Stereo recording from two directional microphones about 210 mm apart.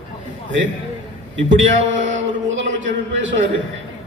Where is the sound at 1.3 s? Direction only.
60° right (ahead or behind).